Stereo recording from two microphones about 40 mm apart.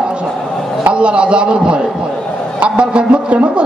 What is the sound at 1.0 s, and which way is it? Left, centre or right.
A man's voice, right.